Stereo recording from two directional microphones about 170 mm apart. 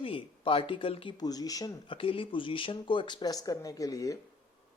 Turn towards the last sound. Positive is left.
turn(degrees=20)  # may be behind; listen again after turning